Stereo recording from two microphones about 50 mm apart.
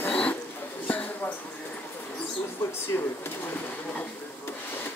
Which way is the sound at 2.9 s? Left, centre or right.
Left.